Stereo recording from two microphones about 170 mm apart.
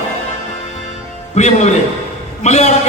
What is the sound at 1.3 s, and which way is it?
A man's voice, 40° left (ahead or behind).